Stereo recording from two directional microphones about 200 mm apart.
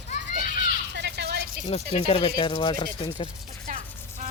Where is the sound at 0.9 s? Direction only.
60° right (ahead or behind).